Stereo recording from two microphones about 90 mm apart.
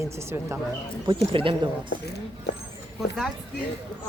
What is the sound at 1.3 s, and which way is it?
Speech, 75° right (ahead or behind).